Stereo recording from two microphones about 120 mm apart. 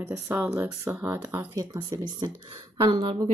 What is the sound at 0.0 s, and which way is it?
Speech, 20° right (ahead or behind).